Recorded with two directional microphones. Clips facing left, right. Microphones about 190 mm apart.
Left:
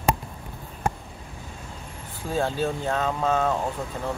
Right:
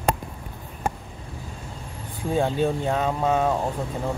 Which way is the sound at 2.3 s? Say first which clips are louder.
Right 3 dB; 15° right (ahead or behind).